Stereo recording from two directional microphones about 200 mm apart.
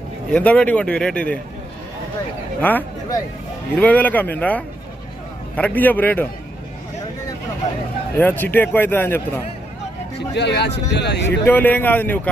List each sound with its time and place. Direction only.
0.3 s a man's voice: 5° left (ahead or behind)
2.6 s a man's voice: 10° left (ahead or behind)
8.2 s a man's voice: 10° left (ahead or behind)
10.1 s speech: 60° left (ahead or behind)
11.4 s a man's voice: 10° left (ahead or behind)